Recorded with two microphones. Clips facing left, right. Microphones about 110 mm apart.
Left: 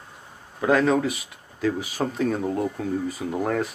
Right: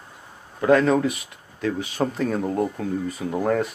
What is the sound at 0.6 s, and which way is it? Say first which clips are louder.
Speech: right 2 dB; centre (ahead or behind).